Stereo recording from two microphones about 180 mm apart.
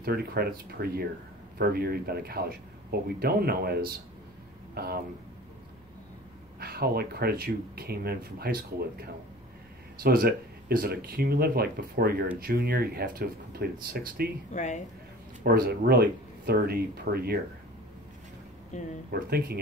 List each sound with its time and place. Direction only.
0.0 s speech: 60° right (ahead or behind)
6.6 s speech: 60° right (ahead or behind)
14.5 s speech: 40° left (ahead or behind)
15.4 s speech: 60° right (ahead or behind)
18.7 s speech: 40° left (ahead or behind)
19.0 s speech: 55° right (ahead or behind)